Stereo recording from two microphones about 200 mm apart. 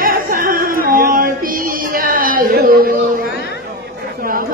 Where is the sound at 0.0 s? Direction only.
45° right (ahead or behind).